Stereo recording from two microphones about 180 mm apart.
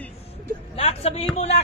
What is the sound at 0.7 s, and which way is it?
Speech, 35° left (ahead or behind).